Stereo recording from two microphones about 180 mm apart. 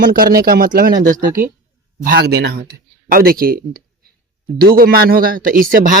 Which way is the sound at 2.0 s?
65° right (ahead or behind).